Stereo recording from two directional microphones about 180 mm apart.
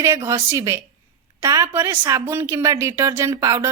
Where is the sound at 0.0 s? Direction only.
15° right (ahead or behind).